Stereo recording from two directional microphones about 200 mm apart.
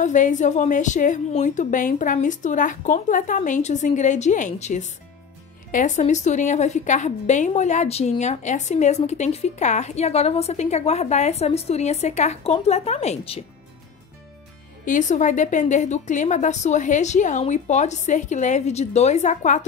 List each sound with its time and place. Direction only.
0.0 s a woman's voice: 40° left (ahead or behind)
14.9 s a woman's voice: 40° left (ahead or behind)